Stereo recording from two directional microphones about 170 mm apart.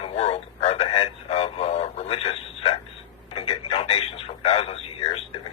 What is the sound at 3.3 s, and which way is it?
Radio, 35° left (ahead or behind).